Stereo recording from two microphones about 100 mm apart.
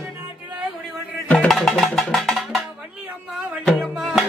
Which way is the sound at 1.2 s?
15° left (ahead or behind).